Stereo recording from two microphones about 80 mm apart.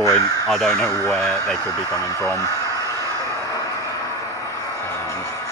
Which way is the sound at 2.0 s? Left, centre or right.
Left.